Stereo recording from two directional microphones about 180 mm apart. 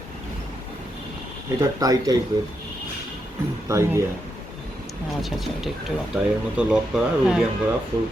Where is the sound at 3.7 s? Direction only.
15° right (ahead or behind).